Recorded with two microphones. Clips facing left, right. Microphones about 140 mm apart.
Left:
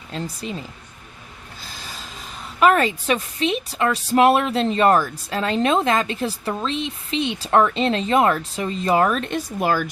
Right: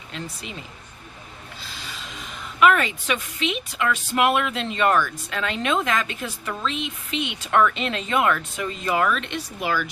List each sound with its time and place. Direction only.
0.1 s a woman's voice: 35° left (ahead or behind)
1.6 s a woman's voice: 40° left (ahead or behind)